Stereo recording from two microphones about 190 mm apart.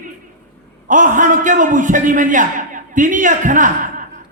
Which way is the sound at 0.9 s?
45° right (ahead or behind).